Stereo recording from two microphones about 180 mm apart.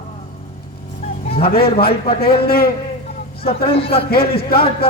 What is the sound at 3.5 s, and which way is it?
Speech, 30° left (ahead or behind).